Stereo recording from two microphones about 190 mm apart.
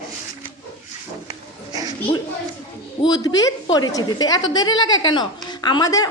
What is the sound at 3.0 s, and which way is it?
A woman's voice, 20° left (ahead or behind).